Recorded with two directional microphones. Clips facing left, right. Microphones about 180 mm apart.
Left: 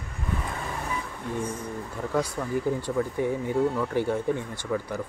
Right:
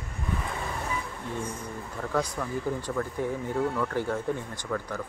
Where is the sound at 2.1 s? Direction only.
10° left (ahead or behind).